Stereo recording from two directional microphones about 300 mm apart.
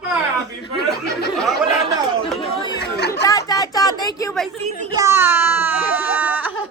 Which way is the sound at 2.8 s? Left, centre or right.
Left.